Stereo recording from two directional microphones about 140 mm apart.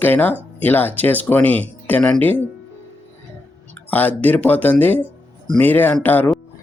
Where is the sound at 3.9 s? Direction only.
10° left (ahead or behind).